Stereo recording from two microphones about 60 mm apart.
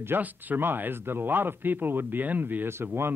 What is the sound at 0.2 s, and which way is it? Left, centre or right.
Speech, right.